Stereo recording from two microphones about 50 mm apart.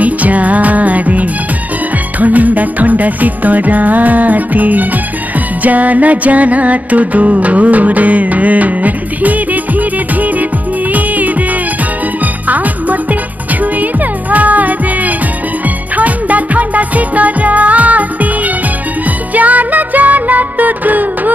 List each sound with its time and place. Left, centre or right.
0.0 s music: right
12.4 s music: right